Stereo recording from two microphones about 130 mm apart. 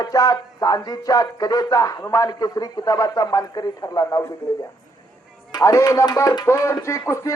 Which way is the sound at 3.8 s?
25° left (ahead or behind).